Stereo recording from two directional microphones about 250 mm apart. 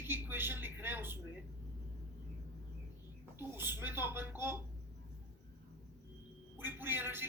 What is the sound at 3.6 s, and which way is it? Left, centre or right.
Speech, centre.